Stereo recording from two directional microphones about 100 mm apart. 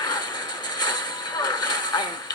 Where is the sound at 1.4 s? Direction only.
45° left (ahead or behind).